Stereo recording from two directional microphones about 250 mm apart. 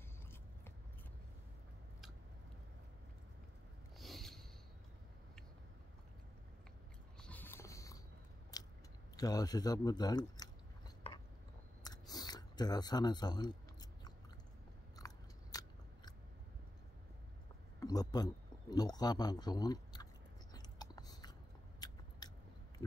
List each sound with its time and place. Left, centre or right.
4.0 s a sound: centre
7.2 s a sound: centre
8.5 s biting: centre
9.1 s speech: centre
11.8 s a sound: centre
15.0 s biting: centre
17.7 s speech: centre
20.5 s biting: centre
21.7 s scissors: centre